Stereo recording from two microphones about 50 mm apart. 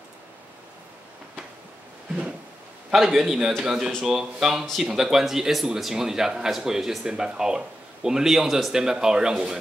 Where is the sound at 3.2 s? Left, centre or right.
Centre.